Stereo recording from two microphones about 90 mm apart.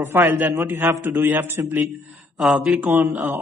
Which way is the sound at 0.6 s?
25° right (ahead or behind).